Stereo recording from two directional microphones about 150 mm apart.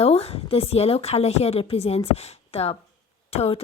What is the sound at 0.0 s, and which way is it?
A woman's voice, 40° left (ahead or behind).